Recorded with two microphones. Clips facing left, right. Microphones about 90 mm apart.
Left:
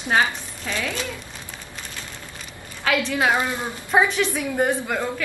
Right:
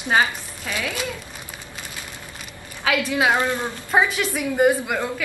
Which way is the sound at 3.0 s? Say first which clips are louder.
Right 1 dB; 5° right (ahead or behind).